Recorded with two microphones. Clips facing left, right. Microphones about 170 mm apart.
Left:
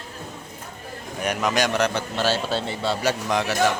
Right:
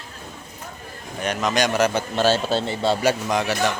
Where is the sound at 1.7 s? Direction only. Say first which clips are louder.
Right 2 dB; 5° right (ahead or behind).